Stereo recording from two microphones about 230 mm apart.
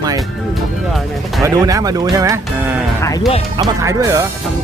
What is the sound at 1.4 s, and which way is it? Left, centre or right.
Speech, centre.